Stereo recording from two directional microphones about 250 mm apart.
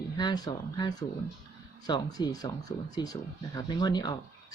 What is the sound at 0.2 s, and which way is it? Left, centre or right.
Speech, centre.